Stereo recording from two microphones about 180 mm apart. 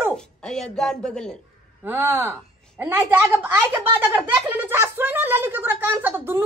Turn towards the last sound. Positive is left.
turn(degrees=-10)  # may be behind; listen again after turning